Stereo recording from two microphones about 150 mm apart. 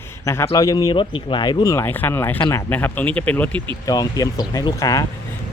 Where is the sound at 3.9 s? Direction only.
25° left (ahead or behind).